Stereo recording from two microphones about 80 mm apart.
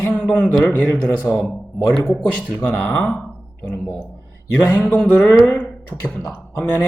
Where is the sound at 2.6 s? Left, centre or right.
Left.